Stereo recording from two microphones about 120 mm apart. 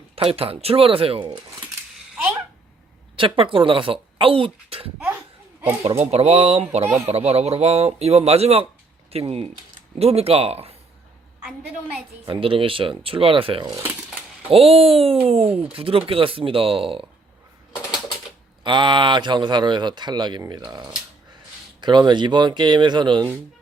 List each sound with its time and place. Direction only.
0.2 s speech: 50° right (ahead or behind)
3.2 s speech: 50° right (ahead or behind)
6.0 s speech: 60° right (ahead or behind)
6.8 s speech: 25° right (ahead or behind)
7.1 s speech: 60° right (ahead or behind)
11.4 s a woman's voice: 5° right (ahead or behind)
12.2 s speech: 45° right (ahead or behind)
18.6 s speech: 40° right (ahead or behind)